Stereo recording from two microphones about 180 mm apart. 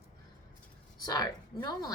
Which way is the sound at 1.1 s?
20° left (ahead or behind).